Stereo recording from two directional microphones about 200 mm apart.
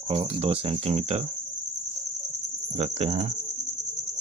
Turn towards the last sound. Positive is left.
turn(degrees=-35)  # may be behind; listen again after turning